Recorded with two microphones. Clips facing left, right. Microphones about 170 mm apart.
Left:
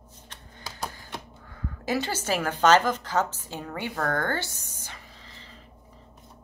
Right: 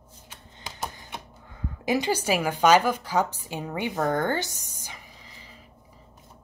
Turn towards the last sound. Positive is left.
turn(degrees=-15)  # may be behind; listen again after turning